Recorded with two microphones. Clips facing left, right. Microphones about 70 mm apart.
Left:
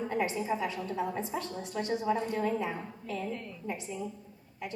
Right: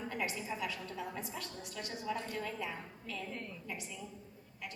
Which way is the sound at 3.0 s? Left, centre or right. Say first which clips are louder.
Left 8 dB; centre.